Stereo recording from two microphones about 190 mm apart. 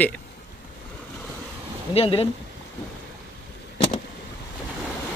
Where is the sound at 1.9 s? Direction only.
30° left (ahead or behind).